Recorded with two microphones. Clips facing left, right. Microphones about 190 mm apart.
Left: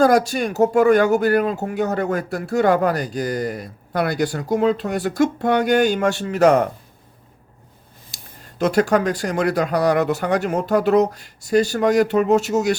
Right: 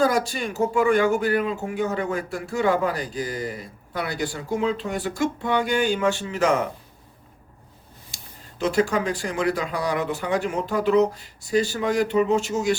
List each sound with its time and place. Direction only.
0.0 s speech: 45° left (ahead or behind)
2.6 s speech: 65° left (ahead or behind)
4.9 s speech: 40° left (ahead or behind)
5.4 s speech: 70° left (ahead or behind)
5.8 s speech: 40° left (ahead or behind)
8.6 s speech: 70° left (ahead or behind)